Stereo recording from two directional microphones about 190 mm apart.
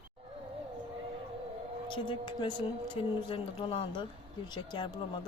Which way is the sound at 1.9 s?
25° left (ahead or behind).